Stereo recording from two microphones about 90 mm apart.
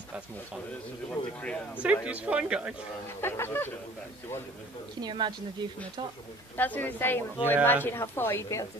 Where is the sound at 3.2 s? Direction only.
25° left (ahead or behind).